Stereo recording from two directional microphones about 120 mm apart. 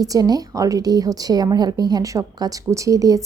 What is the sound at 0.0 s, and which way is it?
A woman's voice, 30° right (ahead or behind).